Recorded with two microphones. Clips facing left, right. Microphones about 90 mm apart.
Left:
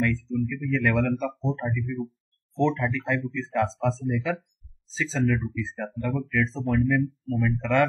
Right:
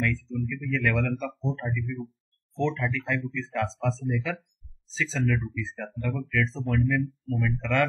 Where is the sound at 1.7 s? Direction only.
15° left (ahead or behind).